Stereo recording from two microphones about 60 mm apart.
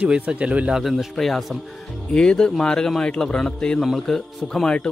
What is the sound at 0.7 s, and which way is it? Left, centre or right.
Speech, centre.